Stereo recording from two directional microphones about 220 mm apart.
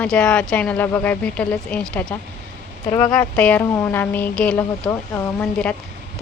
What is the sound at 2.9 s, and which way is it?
Speech, 15° left (ahead or behind).